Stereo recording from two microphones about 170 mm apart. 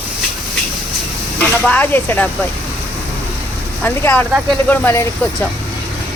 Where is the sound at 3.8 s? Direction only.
10° left (ahead or behind).